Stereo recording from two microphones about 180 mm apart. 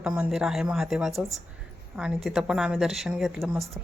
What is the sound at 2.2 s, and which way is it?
A woman's voice, 5° right (ahead or behind).